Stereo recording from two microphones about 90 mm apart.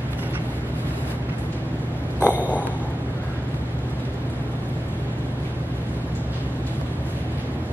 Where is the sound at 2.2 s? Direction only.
15° right (ahead or behind).